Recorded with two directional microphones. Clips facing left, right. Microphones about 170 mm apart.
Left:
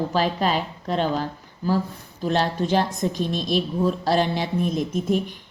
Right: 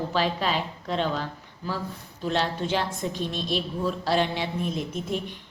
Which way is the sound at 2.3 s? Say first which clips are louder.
Left 4 dB; 40° left (ahead or behind).